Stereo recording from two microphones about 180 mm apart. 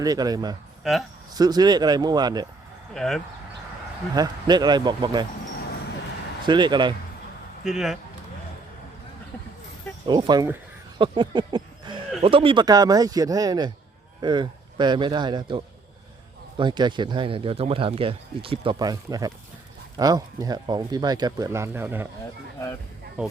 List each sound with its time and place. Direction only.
0.0 s speech: 20° right (ahead or behind)
2.9 s speech: centre (ahead or behind)
4.1 s speech: 20° right (ahead or behind)
6.4 s speech: 25° right (ahead or behind)
7.6 s speech: centre (ahead or behind)
10.1 s speech: 25° right (ahead or behind)
10.9 s a sound: 25° right (ahead or behind)
12.2 s speech: 30° right (ahead or behind); by 22.0 s 10° right (ahead or behind)